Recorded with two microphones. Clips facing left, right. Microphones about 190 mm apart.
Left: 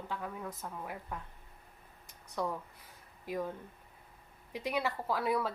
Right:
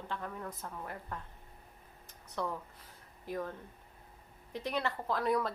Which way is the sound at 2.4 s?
15° left (ahead or behind).